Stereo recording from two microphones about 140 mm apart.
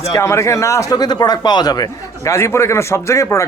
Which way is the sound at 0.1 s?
20° left (ahead or behind).